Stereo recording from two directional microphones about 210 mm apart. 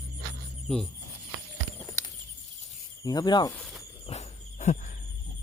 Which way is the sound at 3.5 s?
Centre (ahead or behind).